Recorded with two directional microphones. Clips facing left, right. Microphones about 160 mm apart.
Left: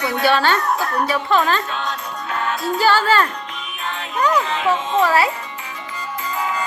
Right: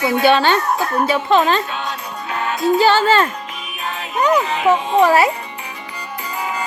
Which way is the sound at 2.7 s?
20° right (ahead or behind).